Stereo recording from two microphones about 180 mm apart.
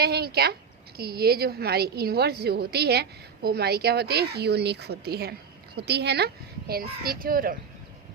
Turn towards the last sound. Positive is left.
turn(degrees=-55)  # may be behind; listen again after turning